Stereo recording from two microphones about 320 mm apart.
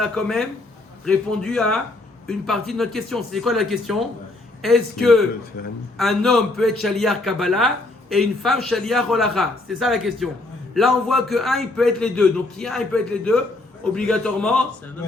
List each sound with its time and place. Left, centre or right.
0.0 s a man's voice: centre
5.6 s speech: left
6.0 s a man's voice: centre